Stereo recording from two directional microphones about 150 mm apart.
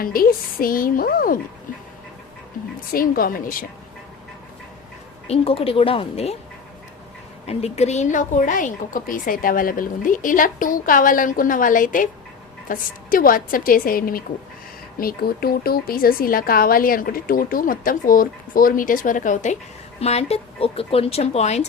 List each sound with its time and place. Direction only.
0.0 s speech: 75° left (ahead or behind)
2.9 s speech: 75° left (ahead or behind)
5.3 s a woman's voice: 40° left (ahead or behind)
7.4 s a woman's voice: 45° left (ahead or behind)
20.0 s speech: 45° left (ahead or behind)